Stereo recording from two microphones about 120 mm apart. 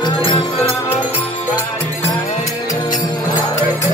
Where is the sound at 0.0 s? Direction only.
40° left (ahead or behind).